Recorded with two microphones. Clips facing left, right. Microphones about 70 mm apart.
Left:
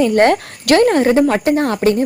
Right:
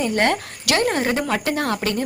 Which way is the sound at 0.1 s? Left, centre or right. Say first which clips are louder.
Left 8 dB; left.